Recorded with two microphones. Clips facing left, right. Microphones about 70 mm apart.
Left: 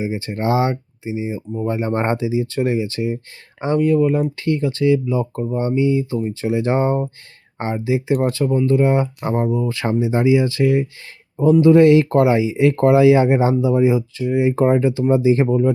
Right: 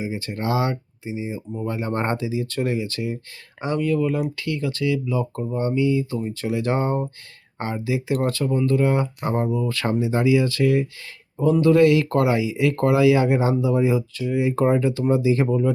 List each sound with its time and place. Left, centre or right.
0.0 s speech: left